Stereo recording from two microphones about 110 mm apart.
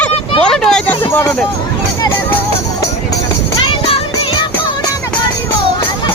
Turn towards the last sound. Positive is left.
turn(degrees=55)  # may be behind; listen again after turning